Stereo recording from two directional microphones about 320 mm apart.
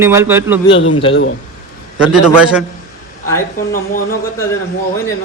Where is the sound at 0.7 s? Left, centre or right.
Left.